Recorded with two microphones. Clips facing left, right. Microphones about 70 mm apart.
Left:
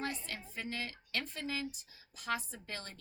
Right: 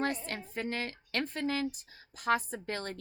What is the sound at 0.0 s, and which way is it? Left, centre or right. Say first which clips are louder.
Speech: right 7 dB; right.